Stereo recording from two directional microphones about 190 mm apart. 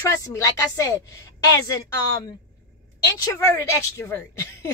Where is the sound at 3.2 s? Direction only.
15° left (ahead or behind).